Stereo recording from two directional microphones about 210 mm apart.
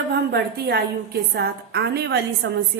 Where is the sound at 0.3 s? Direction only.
50° right (ahead or behind).